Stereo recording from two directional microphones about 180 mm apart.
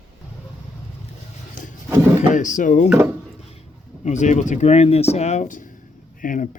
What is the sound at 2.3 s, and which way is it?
Drawer open or close, 45° left (ahead or behind).